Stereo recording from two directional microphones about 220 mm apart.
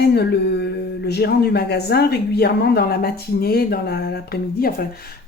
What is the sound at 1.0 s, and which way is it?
Speech, 45° left (ahead or behind).